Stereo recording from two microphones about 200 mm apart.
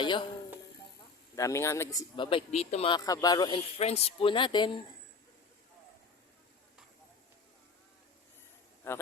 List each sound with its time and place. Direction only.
0.0 s speech: 25° left (ahead or behind)
1.4 s speech: 15° left (ahead or behind)
8.9 s a man's voice: 10° left (ahead or behind)